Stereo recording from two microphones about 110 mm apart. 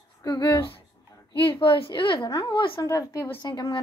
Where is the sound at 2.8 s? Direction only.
30° left (ahead or behind).